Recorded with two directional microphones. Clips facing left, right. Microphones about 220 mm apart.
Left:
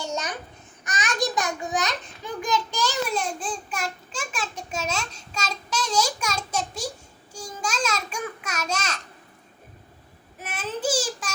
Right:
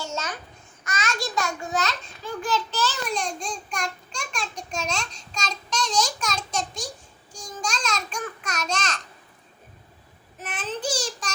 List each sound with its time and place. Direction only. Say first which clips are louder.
0.0 s babbling: left 2 dB; 15° left (ahead or behind)
0.9 s a child's voice: left 3 dB; 15° left (ahead or behind)
7.3 s babbling: left 2 dB; 5° left (ahead or behind)
10.4 s a child's voice: left 2 dB; 10° left (ahead or behind)